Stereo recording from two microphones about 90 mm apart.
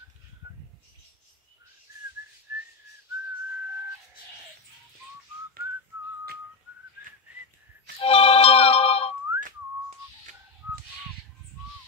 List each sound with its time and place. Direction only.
8.0 s music: 90° left